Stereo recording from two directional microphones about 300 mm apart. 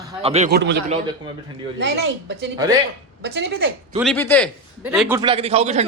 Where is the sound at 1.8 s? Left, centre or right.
Right.